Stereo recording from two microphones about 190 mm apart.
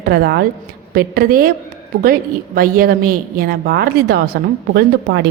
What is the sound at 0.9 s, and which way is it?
Speech, 50° right (ahead or behind).